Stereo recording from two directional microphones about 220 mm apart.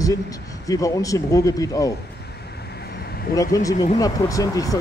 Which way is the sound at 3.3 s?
15° left (ahead or behind).